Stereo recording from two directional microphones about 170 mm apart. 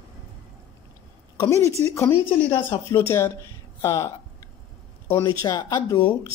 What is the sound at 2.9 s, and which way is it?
Speech, 15° left (ahead or behind).